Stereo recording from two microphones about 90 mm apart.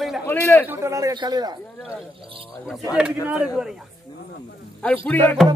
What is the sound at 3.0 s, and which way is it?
Speech, 10° right (ahead or behind).